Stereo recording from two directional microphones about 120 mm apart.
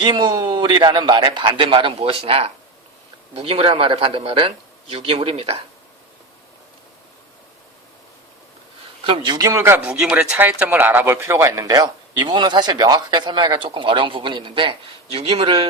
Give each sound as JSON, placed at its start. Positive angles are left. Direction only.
{"t": 0.0, "sound": "a man's voice", "side_deg": -40}
{"t": 9.0, "sound": "speech", "side_deg": -45}
{"t": 9.7, "sound": "speech", "side_deg": -10}